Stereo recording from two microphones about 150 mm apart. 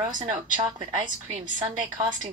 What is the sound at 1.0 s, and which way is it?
Speech, 60° right (ahead or behind).